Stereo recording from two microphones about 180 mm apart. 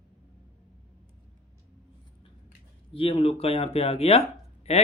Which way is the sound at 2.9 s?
30° left (ahead or behind).